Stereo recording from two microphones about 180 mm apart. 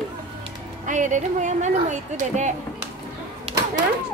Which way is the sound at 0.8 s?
45° right (ahead or behind).